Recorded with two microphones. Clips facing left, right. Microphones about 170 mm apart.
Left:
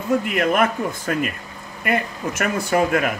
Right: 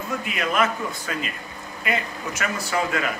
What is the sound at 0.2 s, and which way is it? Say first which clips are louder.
Speech: left 5 dB; 55° left (ahead or behind).